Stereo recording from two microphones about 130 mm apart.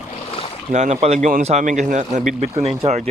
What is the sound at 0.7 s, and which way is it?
Speech, 65° right (ahead or behind).